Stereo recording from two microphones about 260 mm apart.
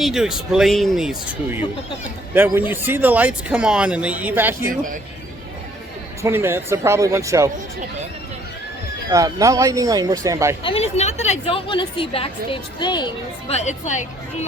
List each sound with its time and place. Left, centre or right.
0.0 s speech: centre
4.7 s speech: right
6.2 s speech: centre
9.0 s speech: centre
10.6 s a woman's voice: left